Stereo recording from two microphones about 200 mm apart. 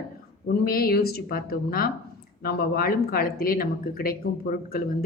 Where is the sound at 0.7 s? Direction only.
50° left (ahead or behind).